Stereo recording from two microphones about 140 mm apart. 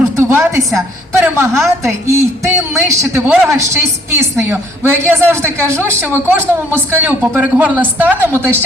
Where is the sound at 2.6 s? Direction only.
20° right (ahead or behind).